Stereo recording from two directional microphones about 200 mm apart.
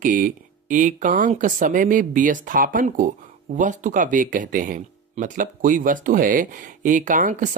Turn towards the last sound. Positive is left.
turn(degrees=-40)  # may be behind; listen again after turning